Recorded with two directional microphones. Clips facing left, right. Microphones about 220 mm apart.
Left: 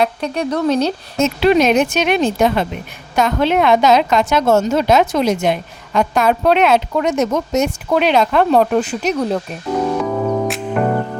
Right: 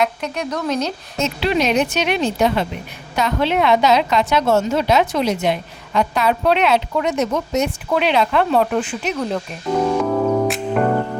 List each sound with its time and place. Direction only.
0.0 s speech: 30° left (ahead or behind)
1.2 s a woman's voice: 50° left (ahead or behind)
9.7 s music: centre (ahead or behind)